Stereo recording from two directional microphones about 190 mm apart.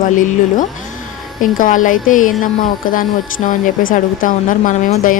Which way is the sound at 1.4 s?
45° left (ahead or behind).